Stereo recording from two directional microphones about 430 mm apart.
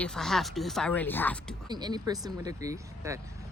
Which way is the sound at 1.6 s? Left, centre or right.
Centre.